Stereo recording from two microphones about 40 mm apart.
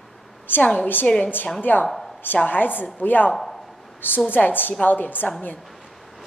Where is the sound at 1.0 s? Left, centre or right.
Left.